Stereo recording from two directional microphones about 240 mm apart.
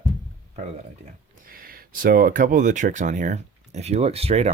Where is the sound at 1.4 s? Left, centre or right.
Right.